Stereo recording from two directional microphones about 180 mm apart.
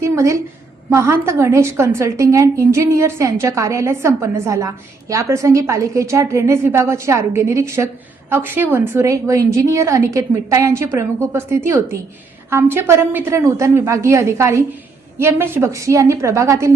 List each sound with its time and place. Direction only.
0.0 s a woman's voice: 15° right (ahead or behind)